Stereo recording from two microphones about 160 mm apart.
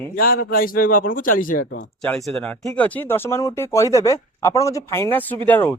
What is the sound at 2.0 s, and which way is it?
Speech, 5° left (ahead or behind).